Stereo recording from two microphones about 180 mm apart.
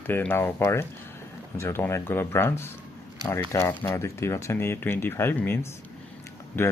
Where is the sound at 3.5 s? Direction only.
15° left (ahead or behind).